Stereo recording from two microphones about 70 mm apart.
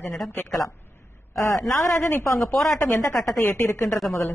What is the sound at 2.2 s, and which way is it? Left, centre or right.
Speech, left.